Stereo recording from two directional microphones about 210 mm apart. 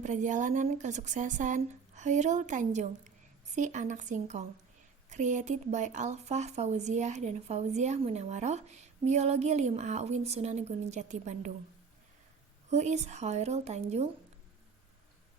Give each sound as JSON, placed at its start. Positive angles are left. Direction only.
{"t": 0.0, "sound": "speech", "side_deg": -35}
{"t": 12.7, "sound": "speech", "side_deg": -35}